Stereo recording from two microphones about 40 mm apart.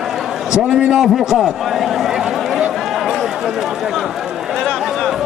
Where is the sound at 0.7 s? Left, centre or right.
Right.